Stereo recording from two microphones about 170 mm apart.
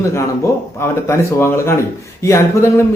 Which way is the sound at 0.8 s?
15° left (ahead or behind).